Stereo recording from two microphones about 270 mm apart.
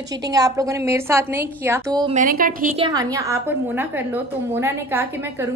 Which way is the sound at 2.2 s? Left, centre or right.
Right.